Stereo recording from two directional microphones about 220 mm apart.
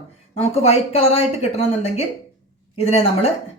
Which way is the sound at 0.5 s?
30° left (ahead or behind).